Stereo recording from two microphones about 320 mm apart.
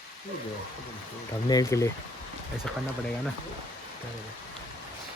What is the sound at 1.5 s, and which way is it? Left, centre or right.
Speech, centre.